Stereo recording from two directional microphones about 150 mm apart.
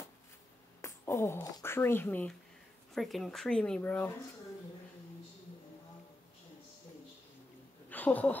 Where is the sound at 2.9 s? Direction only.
Centre (ahead or behind).